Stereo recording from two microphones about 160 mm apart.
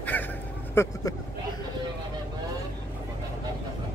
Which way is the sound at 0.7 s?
15° left (ahead or behind).